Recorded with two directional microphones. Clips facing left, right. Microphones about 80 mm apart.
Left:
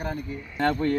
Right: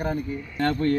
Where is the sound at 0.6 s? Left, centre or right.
Centre.